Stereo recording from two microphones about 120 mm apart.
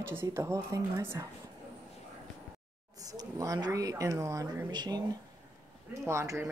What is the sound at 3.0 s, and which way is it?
Speech, 30° right (ahead or behind).